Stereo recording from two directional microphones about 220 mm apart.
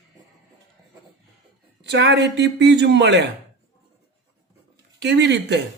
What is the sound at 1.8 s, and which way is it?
Speech, 50° right (ahead or behind).